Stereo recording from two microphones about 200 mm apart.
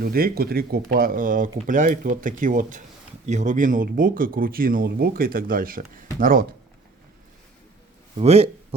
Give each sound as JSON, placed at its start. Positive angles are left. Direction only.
{"t": 0.0, "sound": "speech", "side_deg": -50}
{"t": 8.2, "sound": "speech", "side_deg": -30}